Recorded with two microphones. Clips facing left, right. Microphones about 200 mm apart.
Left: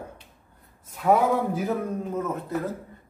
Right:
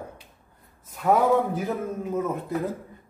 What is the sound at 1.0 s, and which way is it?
Speech, centre (ahead or behind).